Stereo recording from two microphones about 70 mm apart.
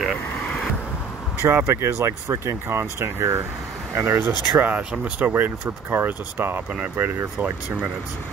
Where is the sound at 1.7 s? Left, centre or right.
Right.